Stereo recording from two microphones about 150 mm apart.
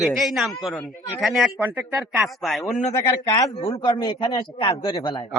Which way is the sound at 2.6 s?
20° left (ahead or behind).